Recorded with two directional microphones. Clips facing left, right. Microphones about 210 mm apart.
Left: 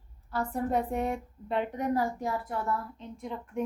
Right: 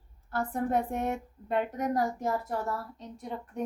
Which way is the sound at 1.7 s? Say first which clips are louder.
Even; 40° right (ahead or behind).